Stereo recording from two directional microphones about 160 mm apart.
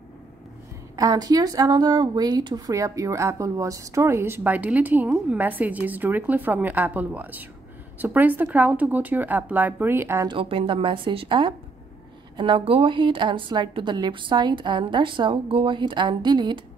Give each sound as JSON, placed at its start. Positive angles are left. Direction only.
{"t": 0.9, "sound": "a woman's voice", "side_deg": -25}
{"t": 10.2, "sound": "a woman's voice", "side_deg": -35}